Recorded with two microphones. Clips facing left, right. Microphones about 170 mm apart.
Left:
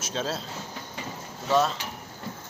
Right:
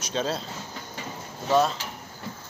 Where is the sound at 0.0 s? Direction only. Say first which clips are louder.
Right 2 dB; centre (ahead or behind).